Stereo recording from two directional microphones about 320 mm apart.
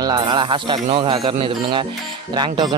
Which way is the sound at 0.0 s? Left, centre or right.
Centre.